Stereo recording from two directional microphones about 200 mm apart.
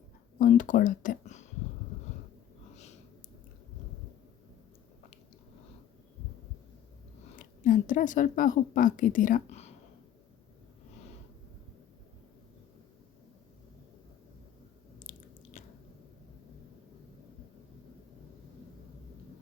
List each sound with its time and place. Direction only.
0.3 s speech: 40° left (ahead or behind)
7.3 s speech: 40° left (ahead or behind)
15.1 s biting: 40° left (ahead or behind)